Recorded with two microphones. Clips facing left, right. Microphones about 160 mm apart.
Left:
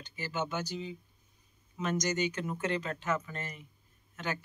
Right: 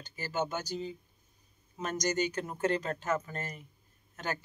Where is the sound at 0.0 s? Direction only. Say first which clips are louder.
Right 2 dB; 40° right (ahead or behind).